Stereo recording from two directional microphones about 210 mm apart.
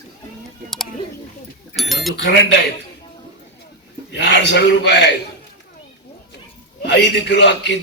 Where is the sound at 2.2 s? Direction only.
60° left (ahead or behind).